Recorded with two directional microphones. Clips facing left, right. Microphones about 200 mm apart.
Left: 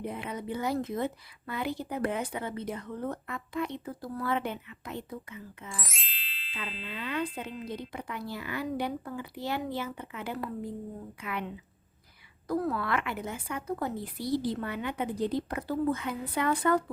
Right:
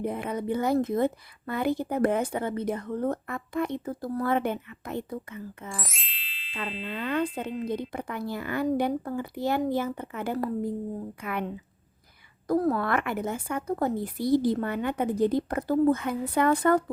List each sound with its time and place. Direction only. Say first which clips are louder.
0.0 s a woman's voice: right 6 dB; 50° right (ahead or behind)
5.7 s ding: right 4 dB; centre (ahead or behind)
6.5 s ding: right 6 dB; 45° right (ahead or behind)
6.8 s a woman's voice: right 5 dB; 50° right (ahead or behind)